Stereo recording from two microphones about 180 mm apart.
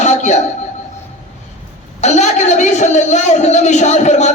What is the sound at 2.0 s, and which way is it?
A man's voice, 40° left (ahead or behind).